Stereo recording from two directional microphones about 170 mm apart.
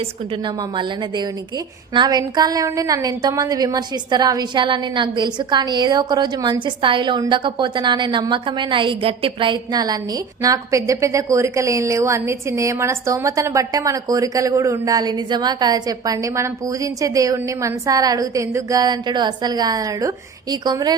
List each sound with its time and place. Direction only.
0.0 s a woman's voice: 30° right (ahead or behind)